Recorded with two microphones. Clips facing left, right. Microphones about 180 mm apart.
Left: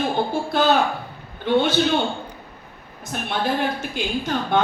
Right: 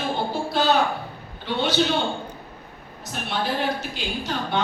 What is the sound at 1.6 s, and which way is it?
Speech, 50° left (ahead or behind).